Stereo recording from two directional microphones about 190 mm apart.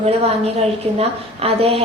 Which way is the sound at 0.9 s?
30° right (ahead or behind).